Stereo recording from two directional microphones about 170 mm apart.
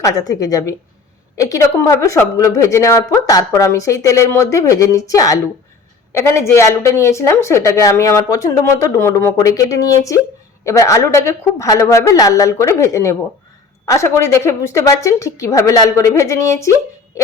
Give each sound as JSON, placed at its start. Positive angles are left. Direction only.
{"t": 0.0, "sound": "a woman's voice", "side_deg": 20}